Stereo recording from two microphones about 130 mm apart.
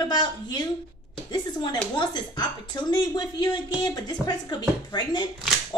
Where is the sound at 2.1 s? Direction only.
35° left (ahead or behind).